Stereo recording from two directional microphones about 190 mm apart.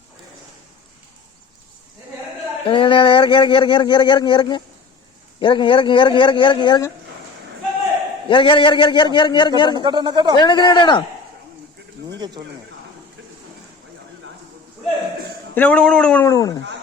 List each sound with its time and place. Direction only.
2.6 s speech: 25° left (ahead or behind)
8.3 s speech: 25° left (ahead or behind)
9.8 s speech: 25° right (ahead or behind)
10.4 s speech: 25° left (ahead or behind)
15.5 s speech: 5° left (ahead or behind)
16.3 s speech: 15° left (ahead or behind)